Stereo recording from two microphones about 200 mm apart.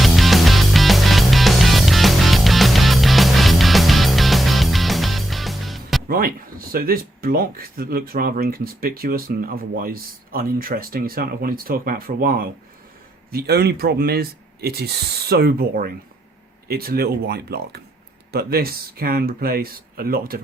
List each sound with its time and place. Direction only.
0.0 s music: centre (ahead or behind)
6.1 s speech: 45° right (ahead or behind)